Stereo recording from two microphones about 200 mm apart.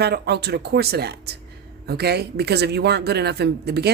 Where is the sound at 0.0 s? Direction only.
55° right (ahead or behind).